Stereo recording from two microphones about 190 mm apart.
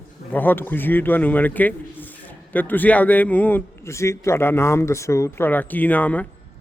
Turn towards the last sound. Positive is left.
turn(degrees=10)  # may be behind; listen again after turning